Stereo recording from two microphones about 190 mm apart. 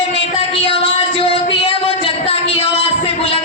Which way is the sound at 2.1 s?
30° left (ahead or behind).